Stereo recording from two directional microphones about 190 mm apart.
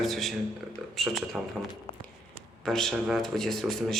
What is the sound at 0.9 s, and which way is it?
Speech, centre (ahead or behind).